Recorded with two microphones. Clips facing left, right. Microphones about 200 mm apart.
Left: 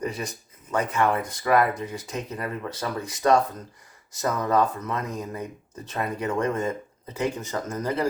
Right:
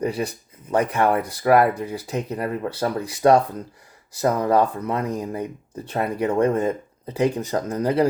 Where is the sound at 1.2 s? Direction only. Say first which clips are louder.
Right 5 dB; 35° right (ahead or behind).